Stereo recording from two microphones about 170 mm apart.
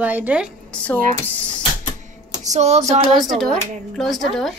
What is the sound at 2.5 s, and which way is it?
Speech, 40° right (ahead or behind).